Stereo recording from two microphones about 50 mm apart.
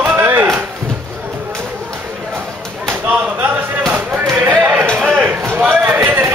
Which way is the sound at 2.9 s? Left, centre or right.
Right.